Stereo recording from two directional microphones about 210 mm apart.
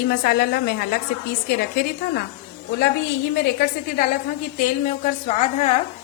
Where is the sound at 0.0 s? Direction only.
50° left (ahead or behind).